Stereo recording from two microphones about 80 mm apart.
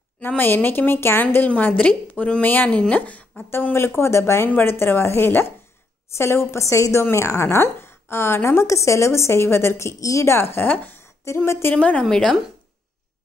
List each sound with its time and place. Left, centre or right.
0.4 s a woman's voice: left
3.7 s a woman's voice: left
11.7 s a woman's voice: centre